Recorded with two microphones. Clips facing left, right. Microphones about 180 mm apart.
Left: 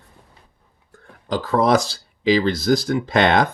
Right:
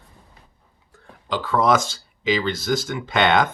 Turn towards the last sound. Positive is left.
turn(degrees=35)  # may be behind; listen again after turning